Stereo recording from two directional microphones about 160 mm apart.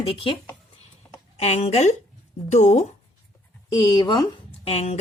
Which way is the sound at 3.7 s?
30° left (ahead or behind).